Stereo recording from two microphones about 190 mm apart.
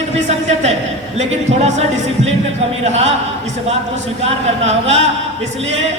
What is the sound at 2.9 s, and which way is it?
Speech, 35° right (ahead or behind).